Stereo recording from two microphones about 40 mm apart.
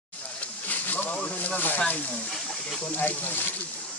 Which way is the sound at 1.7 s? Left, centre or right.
Left.